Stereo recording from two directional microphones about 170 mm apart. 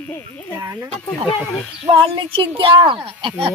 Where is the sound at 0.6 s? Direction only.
20° right (ahead or behind).